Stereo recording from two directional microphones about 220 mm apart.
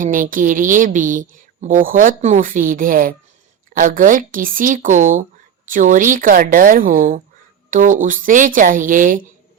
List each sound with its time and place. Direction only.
0.0 s speech: 35° right (ahead or behind)